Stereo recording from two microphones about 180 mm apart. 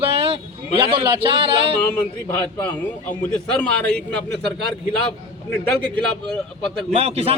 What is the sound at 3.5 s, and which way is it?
Speech, 5° left (ahead or behind).